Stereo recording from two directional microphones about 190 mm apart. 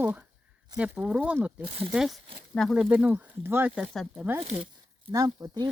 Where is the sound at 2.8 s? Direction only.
10° right (ahead or behind).